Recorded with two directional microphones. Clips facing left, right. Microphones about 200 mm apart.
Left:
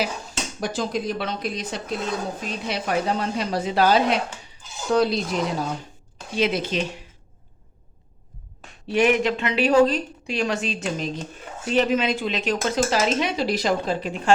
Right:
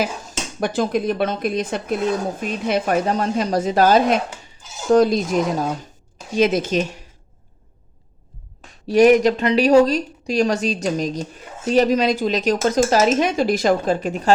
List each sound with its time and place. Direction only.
0.0 s speech: 55° right (ahead or behind)
8.9 s speech: 40° right (ahead or behind)